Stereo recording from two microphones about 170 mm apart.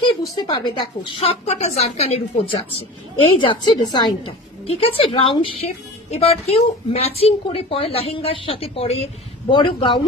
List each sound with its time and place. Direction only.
0.0 s a woman's voice: 25° left (ahead or behind)